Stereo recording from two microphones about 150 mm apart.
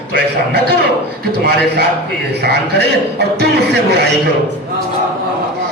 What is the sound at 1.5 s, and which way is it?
A man's voice, 90° right.